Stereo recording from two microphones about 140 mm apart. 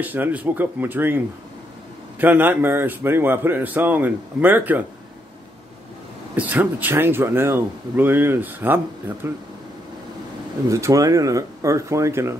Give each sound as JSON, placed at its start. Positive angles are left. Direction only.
{"t": 0.0, "sound": "speech", "side_deg": -10}
{"t": 6.3, "sound": "speech", "side_deg": -10}
{"t": 10.7, "sound": "speech", "side_deg": -25}